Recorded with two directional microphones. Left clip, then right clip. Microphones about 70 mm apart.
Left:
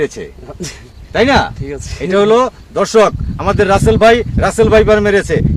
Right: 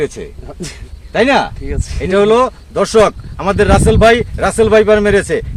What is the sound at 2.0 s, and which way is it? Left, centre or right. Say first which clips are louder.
Speech: even; right.